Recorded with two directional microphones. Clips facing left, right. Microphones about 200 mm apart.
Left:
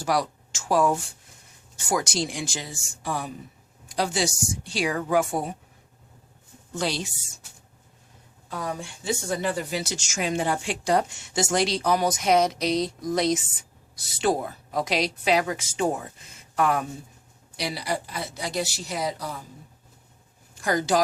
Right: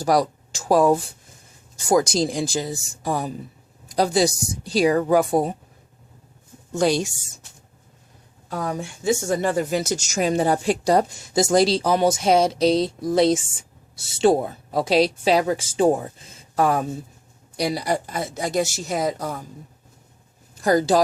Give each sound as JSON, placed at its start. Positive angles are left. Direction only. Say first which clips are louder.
{"t": 0.0, "sound": "speech", "louder": "right 6 dB", "side_deg": -40}
{"t": 6.7, "sound": "speech", "louder": "right 8 dB", "side_deg": -45}
{"t": 8.4, "sound": "speech", "louder": "right 5 dB", "side_deg": -45}
{"t": 17.6, "sound": "speech", "louder": "right 6 dB", "side_deg": -45}
{"t": 20.6, "sound": "speech", "louder": "right 6 dB", "side_deg": -35}